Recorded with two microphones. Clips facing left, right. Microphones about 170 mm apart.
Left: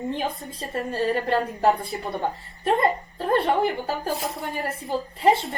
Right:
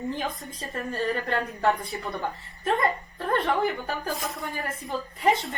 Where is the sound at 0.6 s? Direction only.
30° left (ahead or behind).